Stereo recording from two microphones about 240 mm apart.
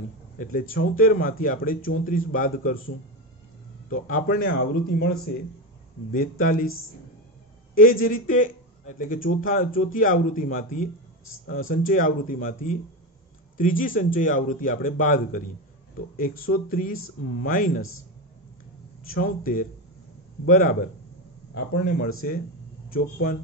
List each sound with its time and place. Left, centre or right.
0.4 s speech: left
3.9 s speech: left
6.1 s speech: left
7.7 s speech: left
19.0 s speech: left
22.2 s speech: left